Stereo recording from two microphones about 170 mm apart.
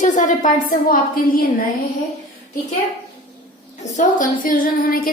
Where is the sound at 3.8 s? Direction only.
45° left (ahead or behind).